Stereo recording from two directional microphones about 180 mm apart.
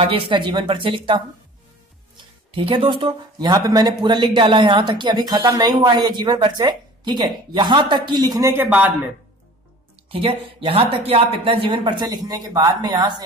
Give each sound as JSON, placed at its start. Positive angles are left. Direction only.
{"t": 0.3, "sound": "speech", "side_deg": -25}
{"t": 2.5, "sound": "speech", "side_deg": -30}
{"t": 10.0, "sound": "speech", "side_deg": -30}